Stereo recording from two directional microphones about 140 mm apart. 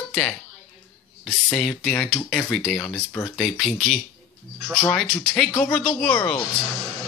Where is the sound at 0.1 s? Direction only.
10° left (ahead or behind).